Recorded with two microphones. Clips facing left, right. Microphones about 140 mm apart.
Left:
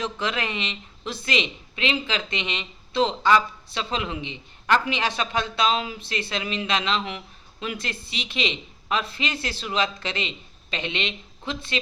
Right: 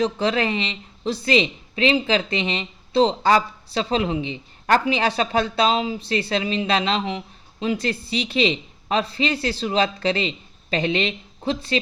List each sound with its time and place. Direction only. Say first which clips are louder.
0.0 s speech: right 7 dB; 35° right (ahead or behind)